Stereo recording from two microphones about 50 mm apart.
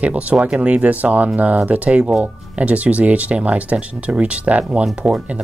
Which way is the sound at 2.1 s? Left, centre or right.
Centre.